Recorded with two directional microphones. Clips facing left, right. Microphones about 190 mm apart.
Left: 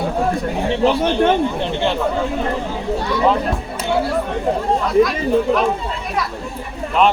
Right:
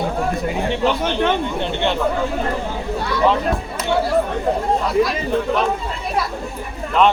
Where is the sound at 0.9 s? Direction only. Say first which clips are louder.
Left 4 dB; 30° left (ahead or behind).